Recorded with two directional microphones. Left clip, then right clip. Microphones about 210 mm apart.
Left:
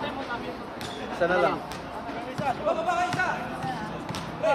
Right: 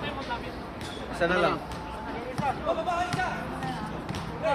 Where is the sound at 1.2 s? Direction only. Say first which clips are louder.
Left 1 dB; 40° right (ahead or behind).